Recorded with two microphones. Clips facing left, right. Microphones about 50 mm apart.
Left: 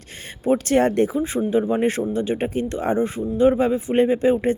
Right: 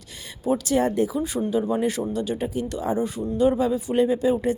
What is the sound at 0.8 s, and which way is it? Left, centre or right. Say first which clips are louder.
Speech: left 4 dB; left.